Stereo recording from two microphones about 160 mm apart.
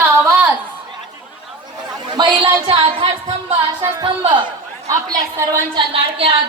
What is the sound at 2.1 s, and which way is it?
A woman's voice, 30° right (ahead or behind).